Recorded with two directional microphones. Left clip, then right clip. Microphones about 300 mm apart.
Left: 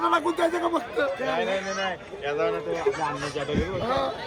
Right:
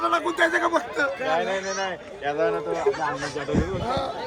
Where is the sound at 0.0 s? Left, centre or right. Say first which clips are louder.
Even; left.